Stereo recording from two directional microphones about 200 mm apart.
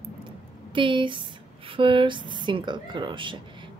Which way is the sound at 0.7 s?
25° right (ahead or behind).